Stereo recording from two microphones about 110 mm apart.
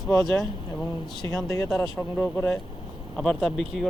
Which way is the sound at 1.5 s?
25° left (ahead or behind).